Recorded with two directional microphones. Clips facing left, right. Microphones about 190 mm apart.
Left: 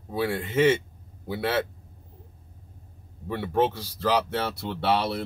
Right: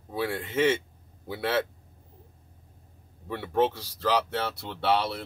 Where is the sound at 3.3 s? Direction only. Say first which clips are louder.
Left 1 dB; 5° left (ahead or behind).